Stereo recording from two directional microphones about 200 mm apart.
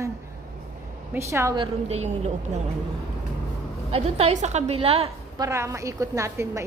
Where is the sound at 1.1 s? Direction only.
15° right (ahead or behind).